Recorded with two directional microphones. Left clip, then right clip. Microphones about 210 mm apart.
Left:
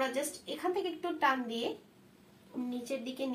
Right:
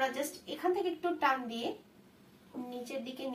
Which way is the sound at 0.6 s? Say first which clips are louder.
Right 2 dB; 15° right (ahead or behind).